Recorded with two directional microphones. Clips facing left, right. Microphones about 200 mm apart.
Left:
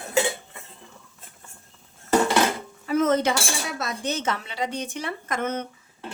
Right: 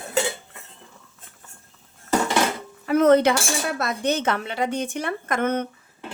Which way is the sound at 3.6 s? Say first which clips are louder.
Right 5 dB; 60° right (ahead or behind).